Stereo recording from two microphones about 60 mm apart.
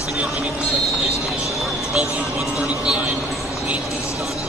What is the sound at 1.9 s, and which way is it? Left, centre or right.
Speech, centre.